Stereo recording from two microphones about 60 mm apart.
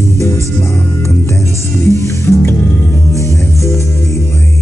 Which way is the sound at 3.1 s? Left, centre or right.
Left.